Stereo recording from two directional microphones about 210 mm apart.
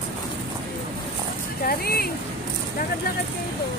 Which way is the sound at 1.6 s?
45° left (ahead or behind).